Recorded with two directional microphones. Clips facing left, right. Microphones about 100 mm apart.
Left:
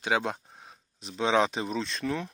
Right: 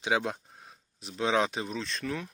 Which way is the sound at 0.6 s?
Centre (ahead or behind).